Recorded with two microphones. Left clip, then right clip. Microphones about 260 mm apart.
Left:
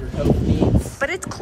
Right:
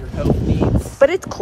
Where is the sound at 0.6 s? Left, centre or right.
Centre.